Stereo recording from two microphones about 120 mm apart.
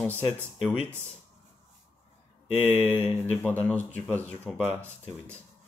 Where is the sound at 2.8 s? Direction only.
15° left (ahead or behind).